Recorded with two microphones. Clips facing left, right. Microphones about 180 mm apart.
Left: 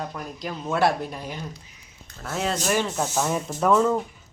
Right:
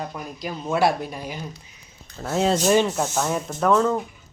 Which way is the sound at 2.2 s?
30° right (ahead or behind).